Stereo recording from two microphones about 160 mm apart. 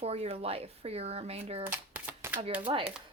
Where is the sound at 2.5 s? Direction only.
35° right (ahead or behind).